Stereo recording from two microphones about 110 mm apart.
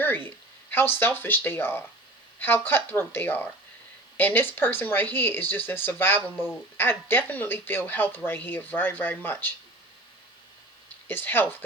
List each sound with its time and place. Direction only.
0.3 s speech: 20° left (ahead or behind)
11.1 s speech: 20° left (ahead or behind)